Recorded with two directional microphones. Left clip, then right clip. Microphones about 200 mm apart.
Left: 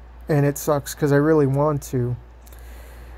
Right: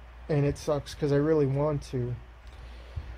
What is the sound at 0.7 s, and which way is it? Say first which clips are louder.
Speech: left 8 dB; 25° left (ahead or behind).